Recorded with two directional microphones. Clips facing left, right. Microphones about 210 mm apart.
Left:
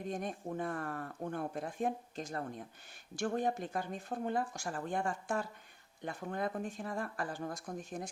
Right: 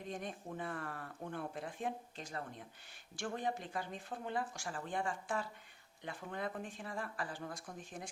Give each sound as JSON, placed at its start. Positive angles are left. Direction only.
{"t": 0.1, "sound": "speech", "side_deg": 45}